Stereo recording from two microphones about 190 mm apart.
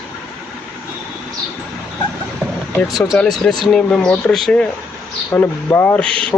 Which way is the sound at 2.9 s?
Centre (ahead or behind).